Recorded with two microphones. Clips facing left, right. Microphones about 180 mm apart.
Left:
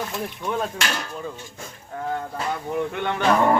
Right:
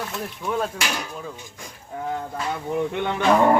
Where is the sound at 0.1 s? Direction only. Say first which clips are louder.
Even; centre (ahead or behind).